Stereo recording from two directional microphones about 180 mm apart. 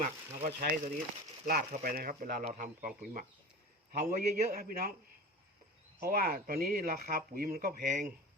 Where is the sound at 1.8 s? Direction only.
55° right (ahead or behind).